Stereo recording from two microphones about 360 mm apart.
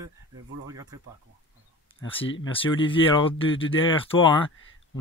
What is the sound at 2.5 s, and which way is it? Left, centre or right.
Speech, centre.